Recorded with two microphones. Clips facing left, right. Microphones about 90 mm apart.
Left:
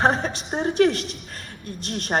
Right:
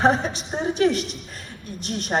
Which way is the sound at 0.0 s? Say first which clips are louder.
Right 1 dB; 35° left (ahead or behind).